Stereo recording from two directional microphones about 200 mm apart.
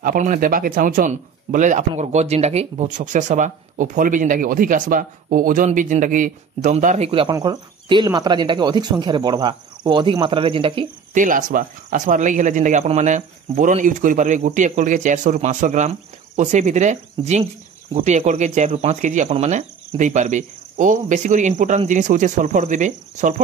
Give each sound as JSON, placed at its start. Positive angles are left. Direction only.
{"t": 0.0, "sound": "a man's voice", "side_deg": -40}
{"t": 11.1, "sound": "a man's voice", "side_deg": -40}